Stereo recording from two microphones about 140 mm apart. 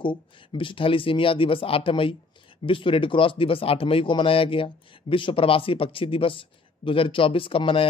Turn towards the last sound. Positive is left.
turn(degrees=40)  # may be behind; listen again after turning